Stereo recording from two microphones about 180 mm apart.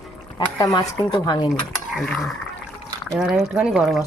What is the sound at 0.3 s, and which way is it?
Speech, 25° left (ahead or behind).